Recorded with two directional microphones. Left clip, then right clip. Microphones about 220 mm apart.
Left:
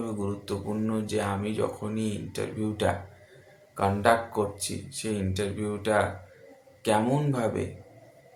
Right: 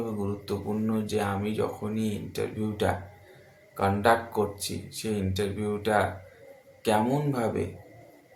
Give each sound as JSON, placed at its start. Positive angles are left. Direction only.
{"t": 0.2, "sound": "speech", "side_deg": 5}